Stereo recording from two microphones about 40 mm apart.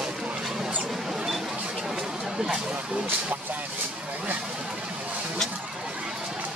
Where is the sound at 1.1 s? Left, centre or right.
Centre.